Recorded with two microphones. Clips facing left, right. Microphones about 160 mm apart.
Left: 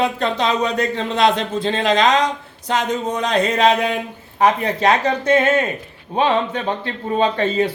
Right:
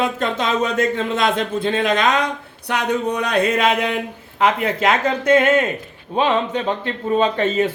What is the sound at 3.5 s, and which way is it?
Speech, 30° left (ahead or behind).